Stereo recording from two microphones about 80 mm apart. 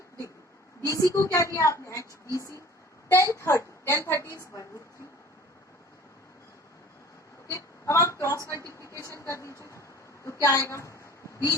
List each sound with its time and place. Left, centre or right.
0.9 s a woman's voice: left
7.5 s a sound: left
8.8 s vehicle: left
9.2 s a woman's voice: left